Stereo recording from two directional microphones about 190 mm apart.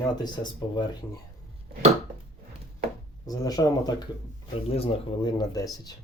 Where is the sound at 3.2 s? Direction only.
20° left (ahead or behind).